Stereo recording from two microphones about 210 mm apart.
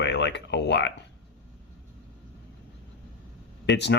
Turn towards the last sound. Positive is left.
turn(degrees=55)  # may be behind; listen again after turning